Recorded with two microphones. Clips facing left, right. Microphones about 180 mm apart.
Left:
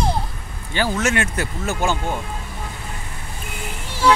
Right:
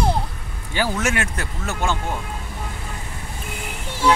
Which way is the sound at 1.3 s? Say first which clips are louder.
Left 3 dB; 5° left (ahead or behind).